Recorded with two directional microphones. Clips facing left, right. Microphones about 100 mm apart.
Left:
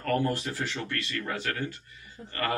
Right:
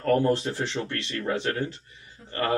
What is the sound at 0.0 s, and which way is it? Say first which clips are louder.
Speech: right 5 dB; 25° right (ahead or behind).